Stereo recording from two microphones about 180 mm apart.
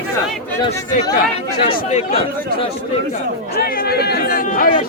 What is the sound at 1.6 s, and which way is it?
Speech, 35° left (ahead or behind).